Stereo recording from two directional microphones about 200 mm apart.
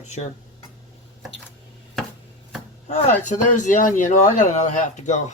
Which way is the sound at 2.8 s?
35° left (ahead or behind).